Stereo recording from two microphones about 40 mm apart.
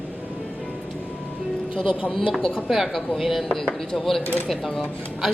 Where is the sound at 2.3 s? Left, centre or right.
Centre.